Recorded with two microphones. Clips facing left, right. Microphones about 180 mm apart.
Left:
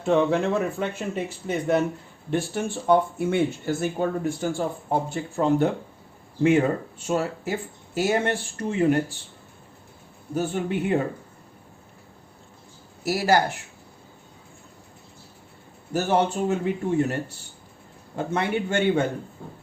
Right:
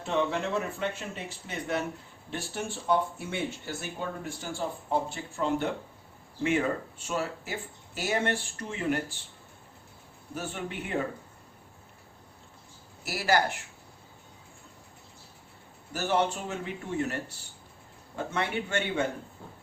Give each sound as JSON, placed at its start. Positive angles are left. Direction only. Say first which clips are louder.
{"t": 0.0, "sound": "speech", "louder": "left 8 dB", "side_deg": 50}
{"t": 10.3, "sound": "speech", "louder": "left 10 dB", "side_deg": 35}
{"t": 13.1, "sound": "speech", "louder": "left 6 dB", "side_deg": 45}
{"t": 15.9, "sound": "speech", "louder": "left 5 dB", "side_deg": 40}
{"t": 18.3, "sound": "speech", "louder": "left 6 dB", "side_deg": 40}